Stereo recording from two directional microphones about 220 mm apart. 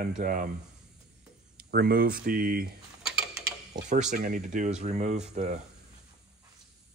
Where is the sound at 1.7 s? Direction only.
45° right (ahead or behind).